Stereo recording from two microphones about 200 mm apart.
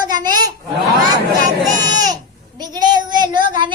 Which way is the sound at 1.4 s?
20° right (ahead or behind).